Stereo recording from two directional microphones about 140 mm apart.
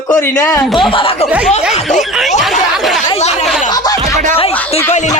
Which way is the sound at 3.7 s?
25° left (ahead or behind).